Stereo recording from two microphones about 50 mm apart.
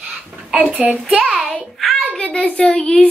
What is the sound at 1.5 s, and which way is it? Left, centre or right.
Speech, centre.